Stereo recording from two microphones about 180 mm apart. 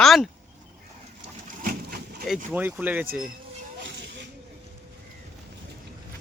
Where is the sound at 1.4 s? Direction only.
55° right (ahead or behind).